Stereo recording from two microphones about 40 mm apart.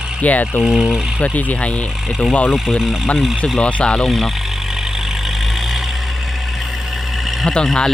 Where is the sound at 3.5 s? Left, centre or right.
Left.